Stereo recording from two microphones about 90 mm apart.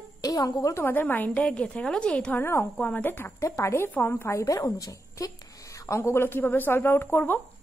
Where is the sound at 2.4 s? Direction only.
30° left (ahead or behind).